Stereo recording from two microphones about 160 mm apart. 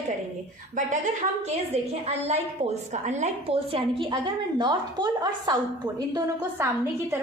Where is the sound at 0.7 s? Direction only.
50° right (ahead or behind); by 6.3 s 25° right (ahead or behind).